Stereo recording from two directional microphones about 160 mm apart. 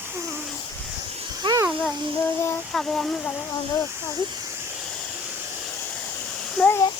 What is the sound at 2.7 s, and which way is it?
Speech, 5° left (ahead or behind).